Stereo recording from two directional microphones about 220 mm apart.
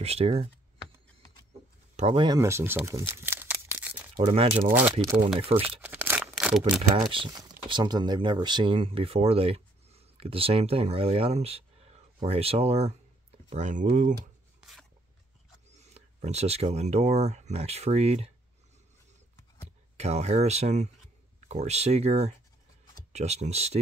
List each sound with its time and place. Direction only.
0.0 s speech: 30° right (ahead or behind)
2.0 s speech: 25° right (ahead or behind); by 4.0 s 10° right (ahead or behind)
4.2 s speech: 25° right (ahead or behind)
4.6 s speech: 10° right (ahead or behind)
5.4 s speech: 25° right (ahead or behind)
5.8 s a sound: 10° right (ahead or behind)
7.0 s speech: 20° right (ahead or behind)
14.6 s a sound: centre (ahead or behind)
15.7 s speech: 30° right (ahead or behind)
20.0 s speech: 30° right (ahead or behind)